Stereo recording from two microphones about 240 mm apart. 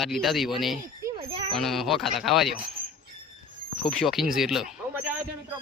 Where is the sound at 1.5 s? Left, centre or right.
Centre.